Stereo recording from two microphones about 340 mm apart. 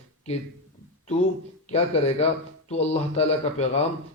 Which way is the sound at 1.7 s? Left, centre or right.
Centre.